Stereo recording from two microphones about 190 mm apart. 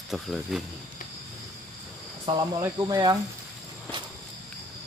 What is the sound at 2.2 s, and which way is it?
Cricket, 20° right (ahead or behind).